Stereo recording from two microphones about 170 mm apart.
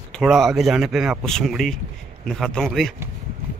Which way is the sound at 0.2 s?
Centre (ahead or behind).